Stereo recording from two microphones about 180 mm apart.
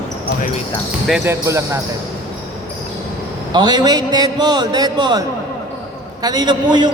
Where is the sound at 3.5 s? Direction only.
25° right (ahead or behind).